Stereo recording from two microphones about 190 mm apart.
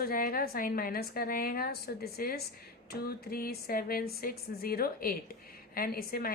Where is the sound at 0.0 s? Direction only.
50° left (ahead or behind).